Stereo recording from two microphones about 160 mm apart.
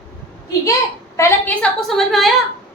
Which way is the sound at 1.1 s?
15° left (ahead or behind).